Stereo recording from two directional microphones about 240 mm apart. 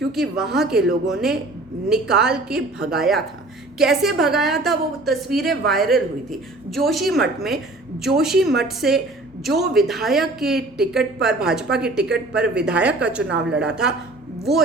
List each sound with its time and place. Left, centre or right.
0.1 s speech: centre
13.2 s a woman's voice: right
13.6 s speech: centre